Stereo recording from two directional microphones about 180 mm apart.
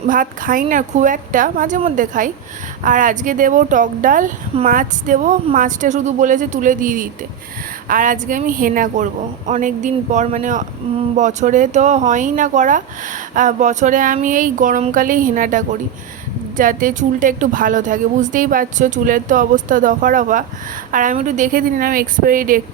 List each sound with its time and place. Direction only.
0.1 s speech: 50° right (ahead or behind)